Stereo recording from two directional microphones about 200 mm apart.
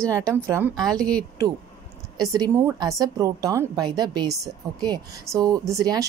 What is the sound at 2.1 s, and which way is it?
A woman's voice, 20° right (ahead or behind).